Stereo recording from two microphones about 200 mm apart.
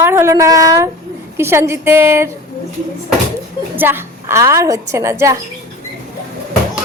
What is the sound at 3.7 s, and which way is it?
A woman's voice, 10° right (ahead or behind).